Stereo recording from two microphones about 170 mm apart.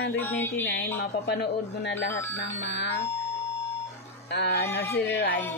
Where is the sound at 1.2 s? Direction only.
80° left.